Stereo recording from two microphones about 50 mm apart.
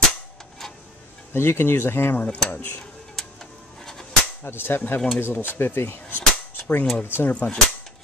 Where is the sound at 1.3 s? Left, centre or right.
Left.